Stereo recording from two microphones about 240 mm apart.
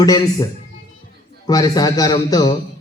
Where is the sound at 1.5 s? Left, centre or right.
Centre.